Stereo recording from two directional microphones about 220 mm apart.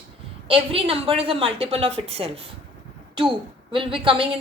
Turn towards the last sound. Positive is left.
turn(degrees=-25)  # may be behind; listen again after turning